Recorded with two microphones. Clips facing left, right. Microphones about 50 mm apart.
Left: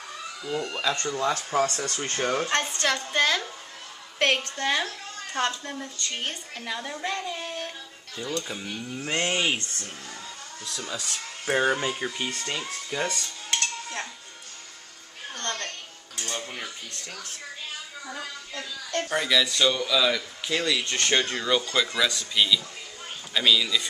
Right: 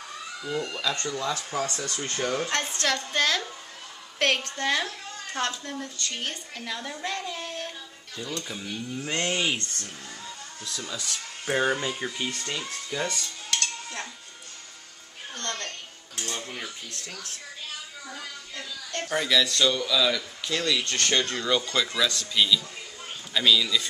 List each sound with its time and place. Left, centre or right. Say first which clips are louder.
0.4 s speech: even; centre
0.7 s speech: left 2 dB; left
2.4 s a man's voice: left 2 dB; centre
2.7 s a man's voice: left 1 dB; centre
10.9 s a man's voice: left 1 dB; centre
15.3 s a sound: left 1 dB; left
16.3 s speech: left 1 dB; centre
18.0 s a woman's voice: left 3 dB; left
19.0 s a man's voice: right 1 dB; centre